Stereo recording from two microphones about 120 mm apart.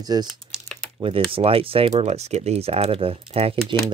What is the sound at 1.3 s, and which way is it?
Speech, 50° right (ahead or behind).